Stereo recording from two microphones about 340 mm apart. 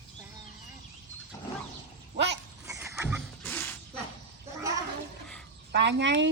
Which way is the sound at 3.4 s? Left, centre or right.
Centre.